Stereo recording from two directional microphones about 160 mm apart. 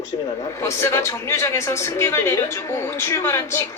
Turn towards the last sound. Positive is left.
turn(degrees=15)  # may be behind; listen again after turning